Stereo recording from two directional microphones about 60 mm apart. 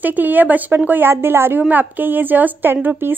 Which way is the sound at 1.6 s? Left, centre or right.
Right.